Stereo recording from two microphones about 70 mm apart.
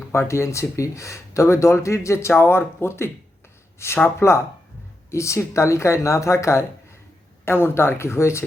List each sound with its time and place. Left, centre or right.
0.1 s speech: left